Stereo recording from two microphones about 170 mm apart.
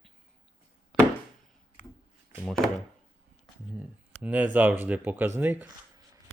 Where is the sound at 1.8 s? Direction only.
50° left (ahead or behind).